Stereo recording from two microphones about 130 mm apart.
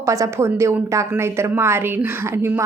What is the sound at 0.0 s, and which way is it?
A woman's voice, 25° right (ahead or behind).